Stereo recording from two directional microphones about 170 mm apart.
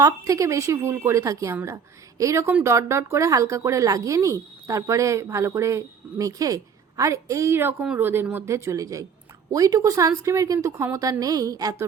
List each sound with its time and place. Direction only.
0.0 s a woman's voice: 20° right (ahead or behind)